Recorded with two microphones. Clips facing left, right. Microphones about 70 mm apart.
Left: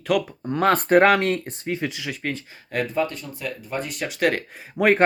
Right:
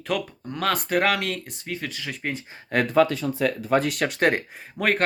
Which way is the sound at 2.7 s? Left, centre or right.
Right.